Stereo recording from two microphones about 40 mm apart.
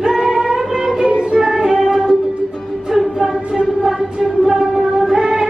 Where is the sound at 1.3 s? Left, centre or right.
Centre.